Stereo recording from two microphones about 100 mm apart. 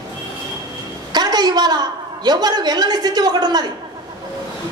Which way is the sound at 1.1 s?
45° right (ahead or behind).